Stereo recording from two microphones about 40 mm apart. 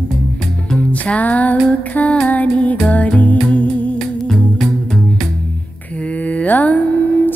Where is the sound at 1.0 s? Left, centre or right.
Left.